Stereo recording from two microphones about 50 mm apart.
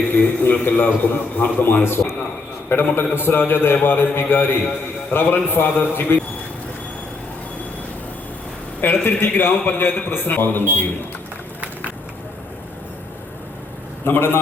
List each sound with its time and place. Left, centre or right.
0.1 s a man's voice: left
1.8 s a man's voice: left
5.6 s a man's voice: left
6.1 s a man's voice: left
8.8 s a man's voice: left
14.0 s a man's voice: left